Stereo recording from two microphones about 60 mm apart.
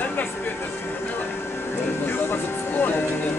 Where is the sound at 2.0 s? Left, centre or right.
Left.